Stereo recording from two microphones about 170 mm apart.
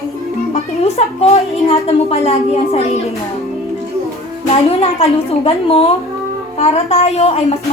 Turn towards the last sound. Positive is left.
turn(degrees=40)  # may be behind; listen again after turning